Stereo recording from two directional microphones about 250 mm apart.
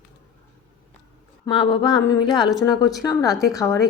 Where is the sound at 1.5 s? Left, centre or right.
Centre.